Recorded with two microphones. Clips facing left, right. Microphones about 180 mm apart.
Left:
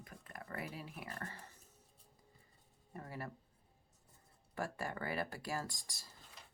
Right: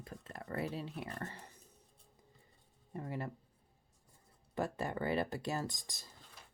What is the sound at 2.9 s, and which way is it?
Speech, 20° right (ahead or behind).